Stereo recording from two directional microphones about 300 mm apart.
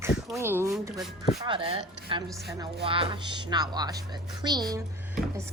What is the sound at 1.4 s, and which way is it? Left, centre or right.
Speech, centre.